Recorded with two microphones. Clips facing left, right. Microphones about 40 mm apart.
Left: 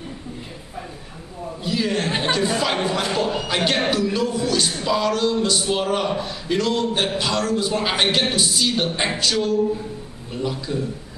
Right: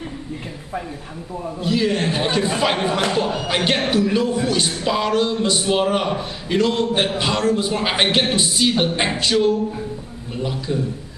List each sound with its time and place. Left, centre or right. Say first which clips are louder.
1.6 s a man's voice: right 3 dB; centre
2.3 s a man's voice: right 2 dB; centre